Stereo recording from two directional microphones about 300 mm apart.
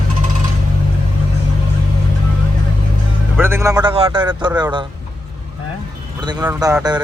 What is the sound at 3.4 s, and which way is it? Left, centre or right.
A man's voice, centre.